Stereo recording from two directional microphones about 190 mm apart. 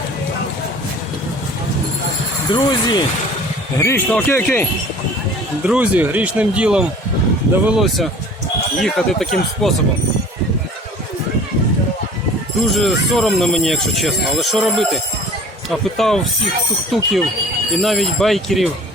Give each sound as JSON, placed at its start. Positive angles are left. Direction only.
{"t": 2.5, "sound": "speech", "side_deg": 25}
{"t": 3.8, "sound": "speech", "side_deg": 10}
{"t": 5.6, "sound": "speech", "side_deg": -5}
{"t": 12.7, "sound": "speech", "side_deg": 0}